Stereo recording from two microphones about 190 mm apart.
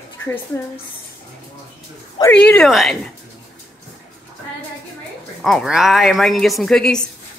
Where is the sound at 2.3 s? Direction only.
5° left (ahead or behind).